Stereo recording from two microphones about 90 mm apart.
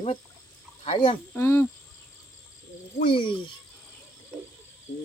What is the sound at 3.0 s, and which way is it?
Speech, 70° left (ahead or behind).